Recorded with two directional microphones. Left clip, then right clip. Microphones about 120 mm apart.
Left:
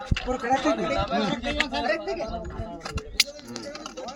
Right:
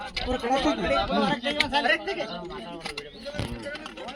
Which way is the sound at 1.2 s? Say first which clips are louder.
Right 1 dB; 55° right (ahead or behind).